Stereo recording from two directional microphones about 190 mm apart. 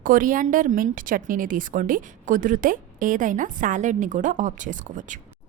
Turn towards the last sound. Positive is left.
turn(degrees=-40)  # may be behind; listen again after turning